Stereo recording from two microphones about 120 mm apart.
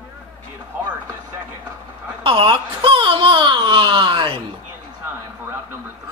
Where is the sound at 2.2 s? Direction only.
45° right (ahead or behind).